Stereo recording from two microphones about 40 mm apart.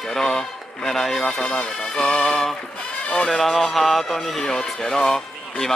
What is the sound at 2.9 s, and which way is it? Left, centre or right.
Music, left.